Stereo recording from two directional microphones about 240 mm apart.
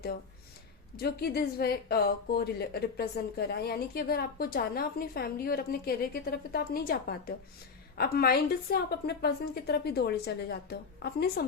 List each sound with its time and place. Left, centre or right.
0.9 s speech: left